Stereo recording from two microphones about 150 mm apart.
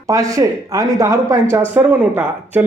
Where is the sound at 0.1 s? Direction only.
20° right (ahead or behind).